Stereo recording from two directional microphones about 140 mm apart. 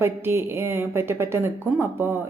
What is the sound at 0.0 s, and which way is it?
A woman's voice, 20° right (ahead or behind).